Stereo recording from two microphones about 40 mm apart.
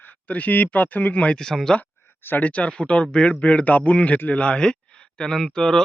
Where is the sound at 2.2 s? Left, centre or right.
Left.